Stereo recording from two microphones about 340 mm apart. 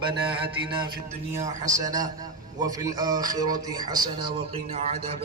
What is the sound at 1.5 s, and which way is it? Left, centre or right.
Speech, right.